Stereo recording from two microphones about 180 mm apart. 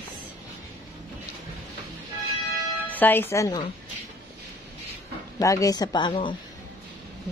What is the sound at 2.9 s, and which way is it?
Speech, 10° left (ahead or behind).